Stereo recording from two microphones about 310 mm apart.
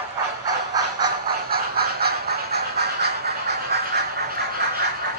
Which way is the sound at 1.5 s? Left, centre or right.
Right.